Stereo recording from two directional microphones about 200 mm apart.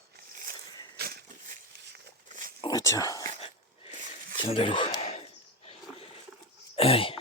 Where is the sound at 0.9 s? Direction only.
50° right (ahead or behind).